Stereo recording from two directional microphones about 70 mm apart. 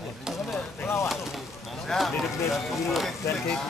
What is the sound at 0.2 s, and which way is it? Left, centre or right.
Vehicle, centre.